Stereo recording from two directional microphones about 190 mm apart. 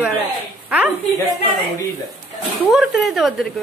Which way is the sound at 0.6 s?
10° right (ahead or behind).